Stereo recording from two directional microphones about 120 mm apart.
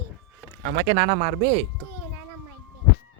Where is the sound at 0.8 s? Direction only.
65° right (ahead or behind).